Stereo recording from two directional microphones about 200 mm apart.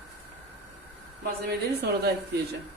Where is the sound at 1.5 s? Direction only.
55° right (ahead or behind).